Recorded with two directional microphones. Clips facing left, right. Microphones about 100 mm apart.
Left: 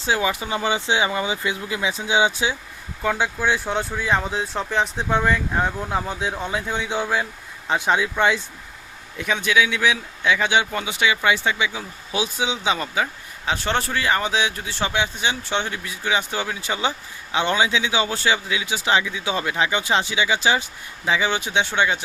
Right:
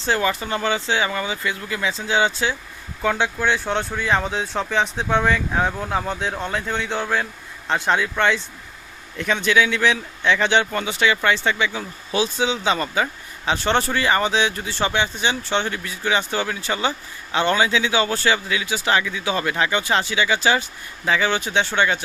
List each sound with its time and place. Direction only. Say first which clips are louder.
0.0 s speech: right 1 dB; 10° left (ahead or behind)